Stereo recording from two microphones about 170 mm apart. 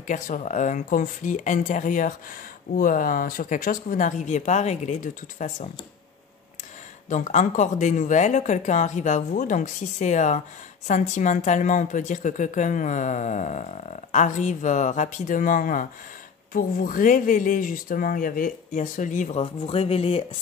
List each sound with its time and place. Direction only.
0.0 s speech: 50° left (ahead or behind)
7.1 s speech: 45° left (ahead or behind)